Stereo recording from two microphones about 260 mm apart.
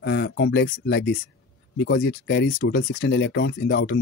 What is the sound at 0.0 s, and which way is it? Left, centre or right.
Speech, left.